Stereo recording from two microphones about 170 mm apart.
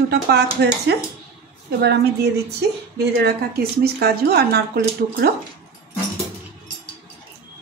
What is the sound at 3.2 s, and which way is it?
Speech, 65° right (ahead or behind).